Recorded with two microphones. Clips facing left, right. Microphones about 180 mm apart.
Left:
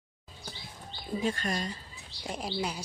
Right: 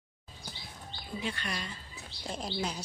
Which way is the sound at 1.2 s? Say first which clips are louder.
Left 6 dB; 45° left (ahead or behind).